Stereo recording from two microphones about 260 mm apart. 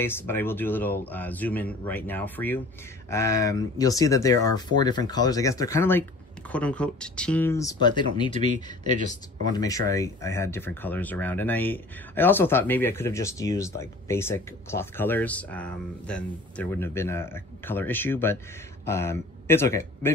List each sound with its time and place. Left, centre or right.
0.0 s speech: centre
9.5 s speech: centre